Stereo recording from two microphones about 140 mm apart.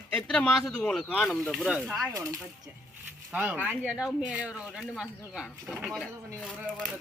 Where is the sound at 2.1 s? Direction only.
25° right (ahead or behind).